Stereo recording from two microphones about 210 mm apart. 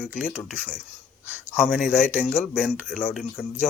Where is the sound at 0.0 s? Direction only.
5° right (ahead or behind).